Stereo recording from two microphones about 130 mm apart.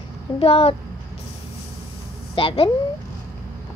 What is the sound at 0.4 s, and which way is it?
Speech, 50° left (ahead or behind).